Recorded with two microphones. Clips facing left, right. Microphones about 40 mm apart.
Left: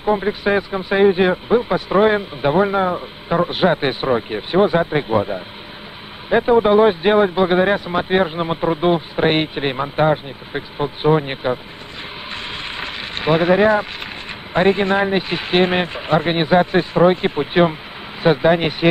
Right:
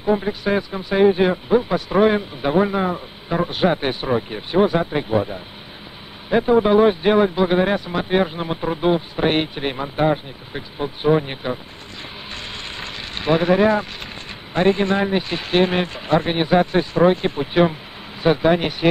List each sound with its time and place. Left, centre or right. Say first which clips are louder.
0.0 s speech: left 2 dB; left
12.6 s vehicle: left 4 dB; centre
14.5 s speech: left 2 dB; centre